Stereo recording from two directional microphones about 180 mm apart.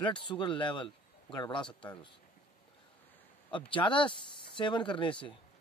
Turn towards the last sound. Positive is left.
turn(degrees=25)  # may be behind; listen again after turning